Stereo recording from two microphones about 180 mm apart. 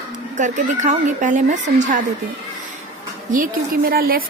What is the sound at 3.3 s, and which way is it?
Speech, 50° right (ahead or behind).